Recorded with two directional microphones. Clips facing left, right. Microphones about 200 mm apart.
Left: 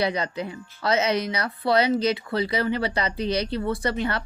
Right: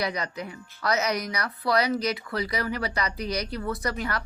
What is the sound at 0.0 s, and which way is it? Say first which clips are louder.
Speech: left 5 dB; 30° left (ahead or behind).